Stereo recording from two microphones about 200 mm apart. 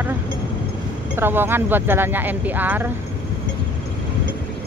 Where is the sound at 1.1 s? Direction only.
10° right (ahead or behind).